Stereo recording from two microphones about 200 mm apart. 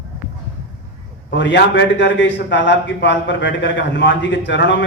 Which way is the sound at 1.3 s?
60° left (ahead or behind).